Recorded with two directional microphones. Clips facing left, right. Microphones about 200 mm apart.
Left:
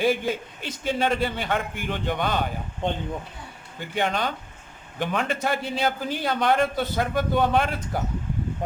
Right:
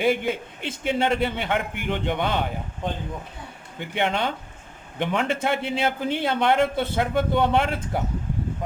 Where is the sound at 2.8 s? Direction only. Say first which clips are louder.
Left 3 dB; 25° left (ahead or behind).